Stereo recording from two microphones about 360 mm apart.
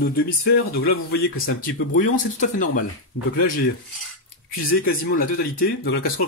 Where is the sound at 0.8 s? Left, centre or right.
Left.